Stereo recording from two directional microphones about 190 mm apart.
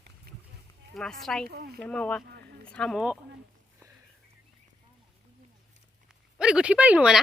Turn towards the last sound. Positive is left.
turn(degrees=-5)  # may be behind; listen again after turning